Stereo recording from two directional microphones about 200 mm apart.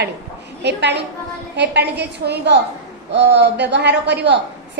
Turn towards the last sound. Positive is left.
turn(degrees=-60)  # may be behind; listen again after turning